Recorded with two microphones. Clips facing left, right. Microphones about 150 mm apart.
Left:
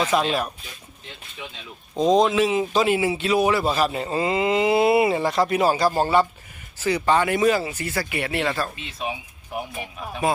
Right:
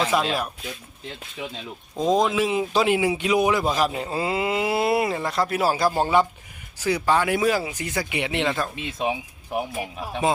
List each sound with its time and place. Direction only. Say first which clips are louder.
0.1 s speech: left 2 dB; 5° right (ahead or behind)
2.0 s speech: left 3 dB; 5° right (ahead or behind)
10.1 s a man's voice: even; 20° right (ahead or behind)